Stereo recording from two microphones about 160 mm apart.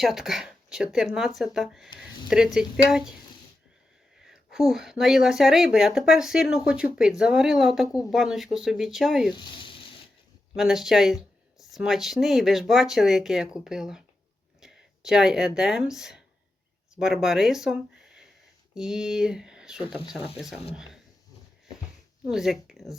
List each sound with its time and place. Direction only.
0.0 s speech: 5° right (ahead or behind)
4.2 s speech: centre (ahead or behind)
9.3 s speech: 30° left (ahead or behind)
10.5 s speech: 5° right (ahead or behind)
22.3 s speech: centre (ahead or behind)